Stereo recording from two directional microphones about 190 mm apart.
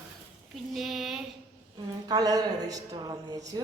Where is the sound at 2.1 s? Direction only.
20° right (ahead or behind).